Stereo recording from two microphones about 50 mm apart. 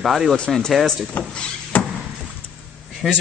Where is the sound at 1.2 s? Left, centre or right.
Left.